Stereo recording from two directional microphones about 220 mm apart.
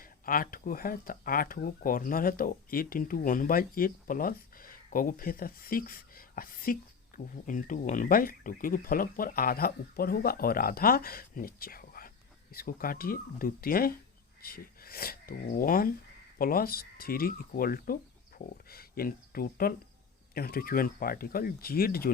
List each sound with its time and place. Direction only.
0.0 s speech: 40° left (ahead or behind)